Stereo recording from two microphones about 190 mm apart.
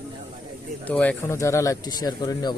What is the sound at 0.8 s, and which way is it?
Speech, 5° left (ahead or behind).